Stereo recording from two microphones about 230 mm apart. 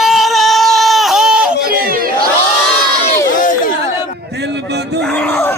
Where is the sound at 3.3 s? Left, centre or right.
Left.